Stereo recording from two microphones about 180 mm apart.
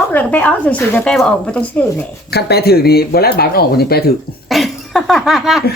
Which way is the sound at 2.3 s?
60° left (ahead or behind).